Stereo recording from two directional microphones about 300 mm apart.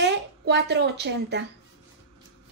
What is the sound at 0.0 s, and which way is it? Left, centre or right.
Speech, right.